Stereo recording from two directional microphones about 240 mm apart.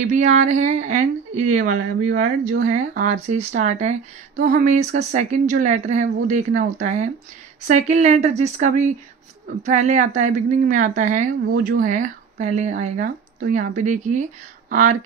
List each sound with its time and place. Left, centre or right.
0.0 s a woman's voice: right